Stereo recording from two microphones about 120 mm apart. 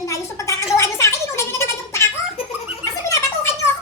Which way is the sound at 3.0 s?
25° left (ahead or behind).